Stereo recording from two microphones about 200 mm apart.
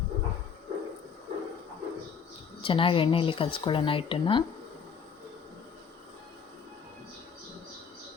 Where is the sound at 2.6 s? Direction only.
25° left (ahead or behind).